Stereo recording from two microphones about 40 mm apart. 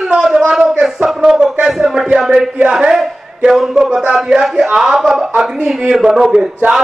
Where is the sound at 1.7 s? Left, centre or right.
Centre.